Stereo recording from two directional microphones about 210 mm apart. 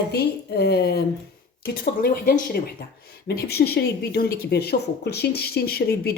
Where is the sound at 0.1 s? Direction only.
50° left (ahead or behind).